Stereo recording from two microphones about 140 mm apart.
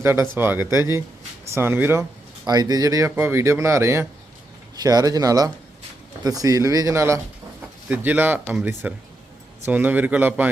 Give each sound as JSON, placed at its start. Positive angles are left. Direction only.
{"t": 0.0, "sound": "a man's voice", "side_deg": -15}
{"t": 2.5, "sound": "a man's voice", "side_deg": -30}